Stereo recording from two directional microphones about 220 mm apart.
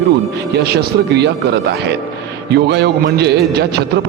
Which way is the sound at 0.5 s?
50° right (ahead or behind).